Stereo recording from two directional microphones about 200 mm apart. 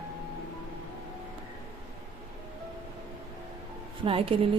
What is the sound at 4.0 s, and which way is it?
Speech, 25° right (ahead or behind).